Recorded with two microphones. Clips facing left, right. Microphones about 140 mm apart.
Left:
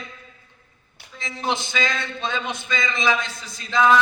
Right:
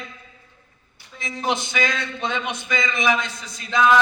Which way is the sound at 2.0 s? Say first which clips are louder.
Right 1 dB; 20° right (ahead or behind).